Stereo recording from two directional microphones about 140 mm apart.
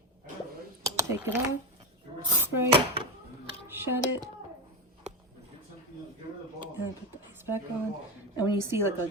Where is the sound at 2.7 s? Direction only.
40° right (ahead or behind).